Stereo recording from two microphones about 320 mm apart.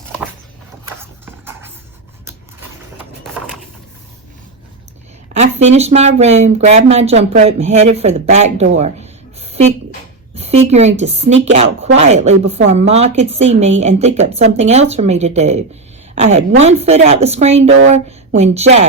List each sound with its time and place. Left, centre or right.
1.2 s dog: centre
2.2 s a sound: centre
5.4 s a woman's voice: centre